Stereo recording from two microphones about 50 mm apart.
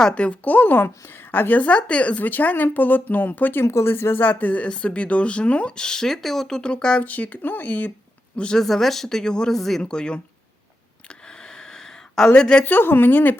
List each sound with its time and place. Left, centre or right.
0.1 s speech: left
1.7 s speech: left
3.6 s speech: left
4.2 s speech: left; by 6.6 s centre
6.6 s speech: centre
7.0 s speech: left
8.5 s speech: centre
9.6 s speech: centre
9.8 s speech: centre
11.1 s a sound: centre
12.3 s speech: centre
12.6 s speech: left